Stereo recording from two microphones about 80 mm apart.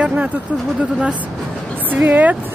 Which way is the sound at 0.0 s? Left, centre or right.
Centre.